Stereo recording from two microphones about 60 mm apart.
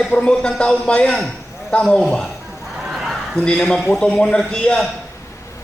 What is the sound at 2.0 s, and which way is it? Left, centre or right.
Speech, centre.